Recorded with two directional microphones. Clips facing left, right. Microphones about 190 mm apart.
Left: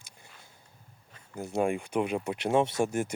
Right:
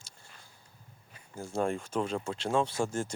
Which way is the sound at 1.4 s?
20° left (ahead or behind).